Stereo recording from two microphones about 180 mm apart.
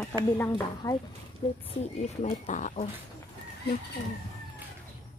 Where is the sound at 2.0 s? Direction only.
40° left (ahead or behind).